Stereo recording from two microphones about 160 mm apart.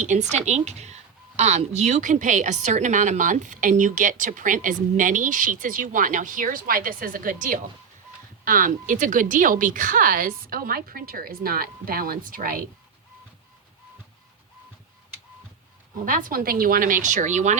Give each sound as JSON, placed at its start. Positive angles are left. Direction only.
{"t": 0.0, "sound": "a woman's voice", "side_deg": -45}
{"t": 16.0, "sound": "speech", "side_deg": -60}